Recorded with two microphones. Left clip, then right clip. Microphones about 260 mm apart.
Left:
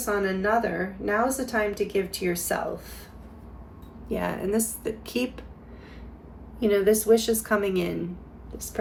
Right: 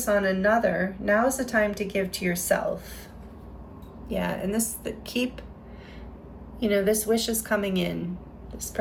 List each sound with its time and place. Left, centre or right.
0.0 s a woman's voice: centre
4.1 s a woman's voice: centre
6.6 s a woman's voice: centre